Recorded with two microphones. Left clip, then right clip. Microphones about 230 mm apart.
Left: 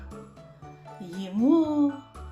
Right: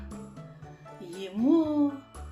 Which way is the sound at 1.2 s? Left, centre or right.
Left.